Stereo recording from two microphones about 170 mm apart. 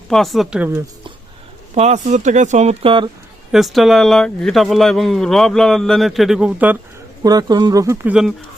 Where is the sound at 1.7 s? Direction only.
40° right (ahead or behind).